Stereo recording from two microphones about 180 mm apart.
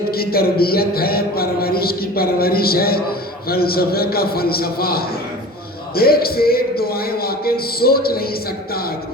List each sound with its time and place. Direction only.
0.1 s speech: 60° left (ahead or behind)